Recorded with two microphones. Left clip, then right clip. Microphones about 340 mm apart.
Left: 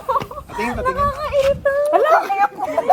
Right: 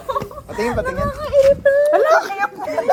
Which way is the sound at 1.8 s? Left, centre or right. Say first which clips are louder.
Right 1 dB; centre.